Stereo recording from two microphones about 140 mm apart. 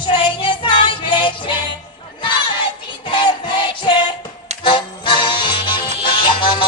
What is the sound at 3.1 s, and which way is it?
Music, 35° left (ahead or behind).